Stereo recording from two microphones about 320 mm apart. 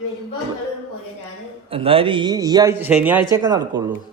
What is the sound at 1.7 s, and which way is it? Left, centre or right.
Speech, centre.